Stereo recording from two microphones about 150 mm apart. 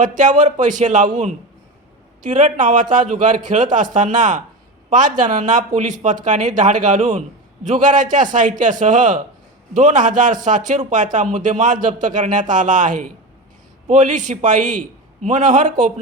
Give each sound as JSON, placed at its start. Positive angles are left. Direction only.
{"t": 0.2, "sound": "a man's voice", "side_deg": -55}